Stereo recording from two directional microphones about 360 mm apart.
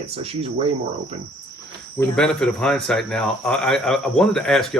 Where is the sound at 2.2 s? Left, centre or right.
Centre.